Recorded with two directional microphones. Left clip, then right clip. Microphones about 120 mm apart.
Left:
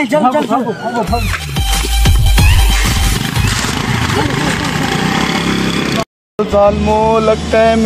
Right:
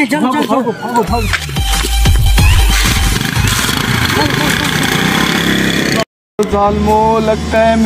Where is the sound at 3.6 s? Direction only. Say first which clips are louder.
Right 3 dB; 40° right (ahead or behind).